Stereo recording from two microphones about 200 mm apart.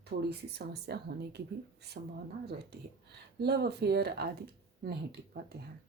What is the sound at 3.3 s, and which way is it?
Speech, 55° right (ahead or behind).